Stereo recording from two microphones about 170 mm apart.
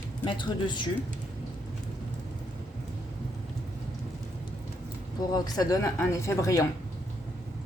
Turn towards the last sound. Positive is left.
turn(degrees=20)  # may be behind; listen again after turning